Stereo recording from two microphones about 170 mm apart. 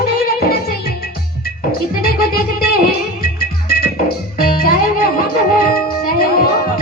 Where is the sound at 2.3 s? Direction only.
60° left (ahead or behind).